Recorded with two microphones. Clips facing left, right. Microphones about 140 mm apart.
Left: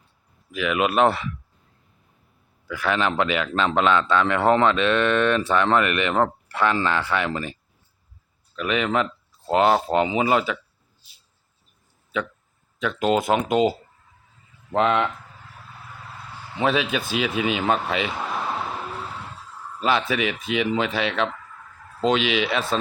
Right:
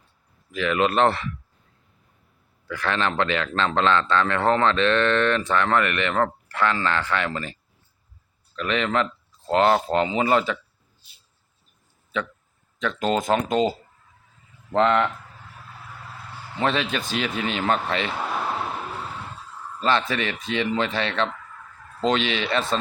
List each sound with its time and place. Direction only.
0.5 s speech: 10° left (ahead or behind)
2.6 s speech: 10° left (ahead or behind)
8.5 s speech: 10° left (ahead or behind)
12.8 s speech: 10° left (ahead or behind)
16.6 s speech: 10° left (ahead or behind)
19.8 s speech: 5° left (ahead or behind)